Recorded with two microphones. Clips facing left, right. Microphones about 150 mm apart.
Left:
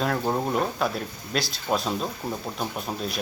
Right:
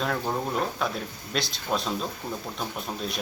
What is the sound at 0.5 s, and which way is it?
Speech, 5° left (ahead or behind).